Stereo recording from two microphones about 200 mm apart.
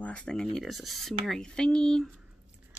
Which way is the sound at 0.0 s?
5° left (ahead or behind).